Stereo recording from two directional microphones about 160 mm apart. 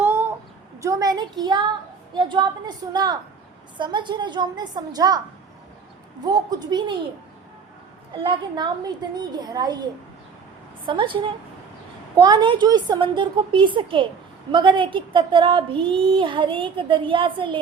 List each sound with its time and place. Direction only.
0.0 s a sound: 15° right (ahead or behind)
0.8 s a woman's voice: 20° right (ahead or behind)
6.2 s a woman's voice: 25° right (ahead or behind)
8.2 s a woman's voice: 30° right (ahead or behind)